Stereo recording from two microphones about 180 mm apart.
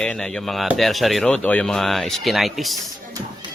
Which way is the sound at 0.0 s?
5° left (ahead or behind).